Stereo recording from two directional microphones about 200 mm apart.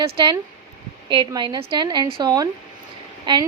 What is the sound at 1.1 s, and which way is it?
A woman's voice, 25° right (ahead or behind).